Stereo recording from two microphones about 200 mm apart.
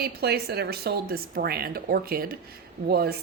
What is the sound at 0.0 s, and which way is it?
Speech, 50° right (ahead or behind).